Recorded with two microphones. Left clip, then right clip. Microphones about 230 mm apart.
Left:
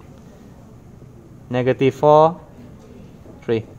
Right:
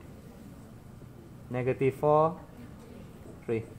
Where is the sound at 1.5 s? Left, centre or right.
Left.